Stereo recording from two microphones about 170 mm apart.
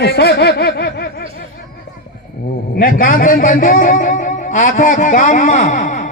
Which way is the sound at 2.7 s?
55° left (ahead or behind).